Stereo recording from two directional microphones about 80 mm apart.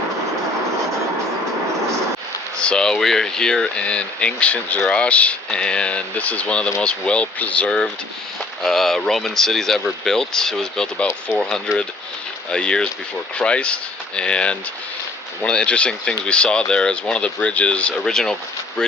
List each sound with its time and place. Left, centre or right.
2.6 s speech: centre